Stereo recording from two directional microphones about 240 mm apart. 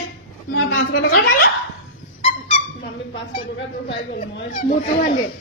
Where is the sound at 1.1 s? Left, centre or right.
Left.